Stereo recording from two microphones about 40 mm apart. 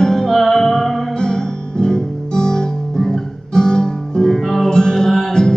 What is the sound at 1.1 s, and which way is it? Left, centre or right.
Music, centre.